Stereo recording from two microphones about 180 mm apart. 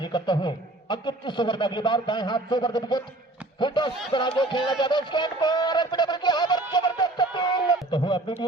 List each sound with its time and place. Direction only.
0.0 s speech: 25° left (ahead or behind)